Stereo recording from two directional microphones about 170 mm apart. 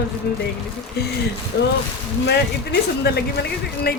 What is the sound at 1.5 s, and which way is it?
Speech, 70° left (ahead or behind).